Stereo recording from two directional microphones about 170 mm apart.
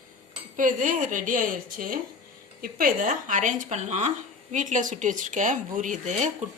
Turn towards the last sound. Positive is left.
turn(degrees=-45)  # may be behind; listen again after turning